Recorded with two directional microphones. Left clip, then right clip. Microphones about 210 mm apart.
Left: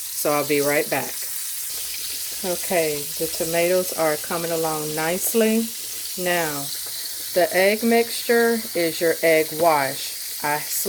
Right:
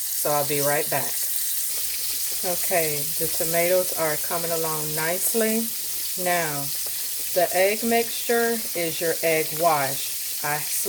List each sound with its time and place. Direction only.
0.2 s speech: 35° left (ahead or behind)
2.7 s frying: 20° left (ahead or behind)